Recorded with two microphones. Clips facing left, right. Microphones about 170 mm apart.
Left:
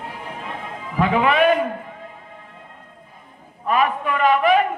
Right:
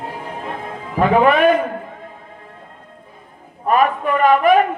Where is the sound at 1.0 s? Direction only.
45° right (ahead or behind).